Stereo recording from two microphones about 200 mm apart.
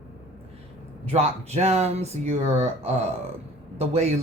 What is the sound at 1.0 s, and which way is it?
Speech, 30° right (ahead or behind).